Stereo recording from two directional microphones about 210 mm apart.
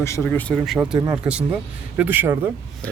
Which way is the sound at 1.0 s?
15° right (ahead or behind).